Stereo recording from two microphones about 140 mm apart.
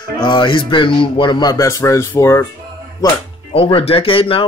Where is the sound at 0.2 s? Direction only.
35° left (ahead or behind); by 2.4 s 20° left (ahead or behind).